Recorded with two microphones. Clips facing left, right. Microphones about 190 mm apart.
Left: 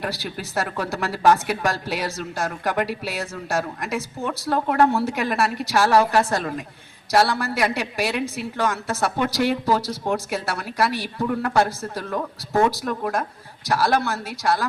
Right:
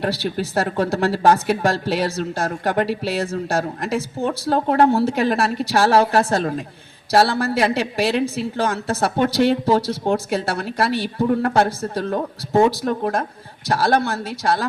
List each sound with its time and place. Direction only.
0.3 s speech: 30° right (ahead or behind)